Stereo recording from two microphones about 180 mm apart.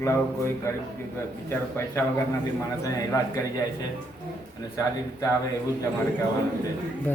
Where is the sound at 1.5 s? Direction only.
15° left (ahead or behind).